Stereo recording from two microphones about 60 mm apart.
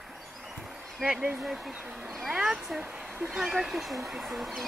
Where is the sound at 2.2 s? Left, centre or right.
Centre.